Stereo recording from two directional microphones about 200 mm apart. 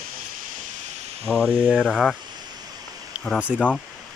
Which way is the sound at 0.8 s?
35° right (ahead or behind).